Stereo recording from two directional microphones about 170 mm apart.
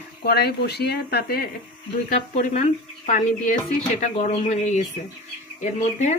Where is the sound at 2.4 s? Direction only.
45° left (ahead or behind).